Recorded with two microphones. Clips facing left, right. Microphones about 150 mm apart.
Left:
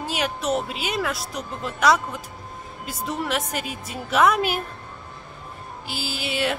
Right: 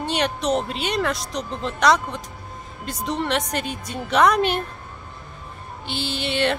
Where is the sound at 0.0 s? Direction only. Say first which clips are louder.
Right 3 dB; 5° left (ahead or behind).